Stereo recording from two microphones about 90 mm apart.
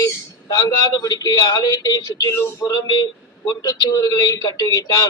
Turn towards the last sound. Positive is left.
turn(degrees=45)  # may be behind; listen again after turning